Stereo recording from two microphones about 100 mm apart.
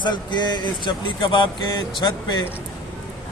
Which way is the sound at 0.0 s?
50° left (ahead or behind).